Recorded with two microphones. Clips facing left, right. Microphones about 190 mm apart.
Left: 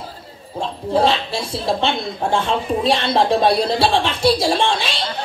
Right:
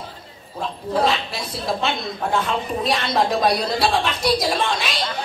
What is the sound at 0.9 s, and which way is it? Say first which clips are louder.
A woman's voice: left 4 dB; 30° left (ahead or behind).